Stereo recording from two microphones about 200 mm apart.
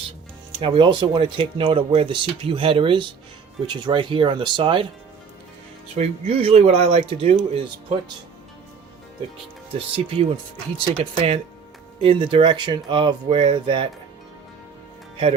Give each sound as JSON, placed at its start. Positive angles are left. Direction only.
{"t": 0.6, "sound": "speech", "side_deg": -25}
{"t": 6.0, "sound": "speech", "side_deg": -30}
{"t": 9.7, "sound": "speech", "side_deg": -30}